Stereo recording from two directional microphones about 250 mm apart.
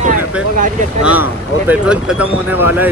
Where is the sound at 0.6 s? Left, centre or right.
Right.